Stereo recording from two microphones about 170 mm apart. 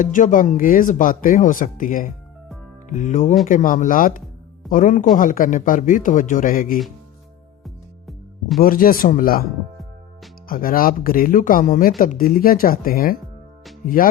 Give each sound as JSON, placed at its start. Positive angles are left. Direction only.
{"t": 0.0, "sound": "speech", "side_deg": 50}
{"t": 7.6, "sound": "music", "side_deg": 0}
{"t": 8.5, "sound": "speech", "side_deg": 55}
{"t": 10.5, "sound": "speech", "side_deg": 55}